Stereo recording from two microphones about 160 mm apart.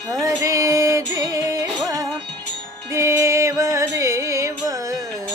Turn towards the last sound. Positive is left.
turn(degrees=-20)  # may be behind; listen again after turning